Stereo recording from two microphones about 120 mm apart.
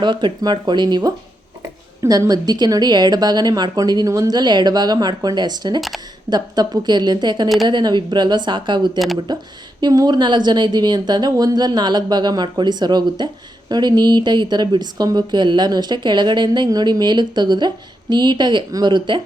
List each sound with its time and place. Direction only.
0.0 s a woman's voice: 40° right (ahead or behind)